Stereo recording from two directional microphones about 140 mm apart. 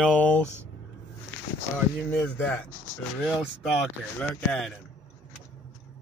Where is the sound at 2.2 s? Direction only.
10° left (ahead or behind).